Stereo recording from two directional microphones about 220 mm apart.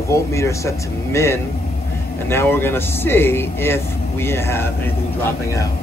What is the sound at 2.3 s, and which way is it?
Speech, 10° left (ahead or behind).